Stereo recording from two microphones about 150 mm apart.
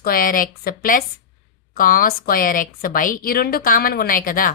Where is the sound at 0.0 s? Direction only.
75° left (ahead or behind).